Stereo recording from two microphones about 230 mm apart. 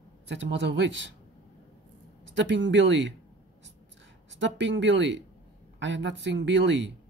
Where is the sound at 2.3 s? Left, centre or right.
Right.